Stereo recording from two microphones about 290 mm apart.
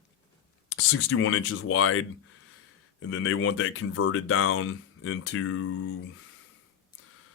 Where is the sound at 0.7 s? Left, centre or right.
Left.